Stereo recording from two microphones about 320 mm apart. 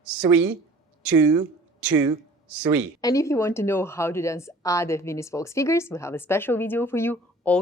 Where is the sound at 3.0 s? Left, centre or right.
Centre.